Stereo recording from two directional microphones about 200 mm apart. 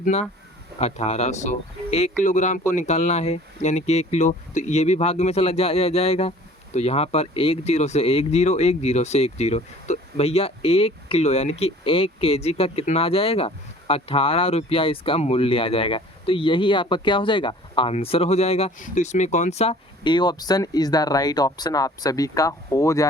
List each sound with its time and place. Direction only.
0.0 s speech: 35° left (ahead or behind); by 23.0 s 15° left (ahead or behind)